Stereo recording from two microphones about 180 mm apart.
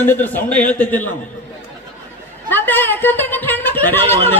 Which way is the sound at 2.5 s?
10° left (ahead or behind).